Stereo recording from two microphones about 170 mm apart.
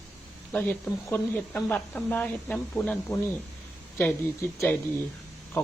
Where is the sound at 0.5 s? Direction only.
5° left (ahead or behind).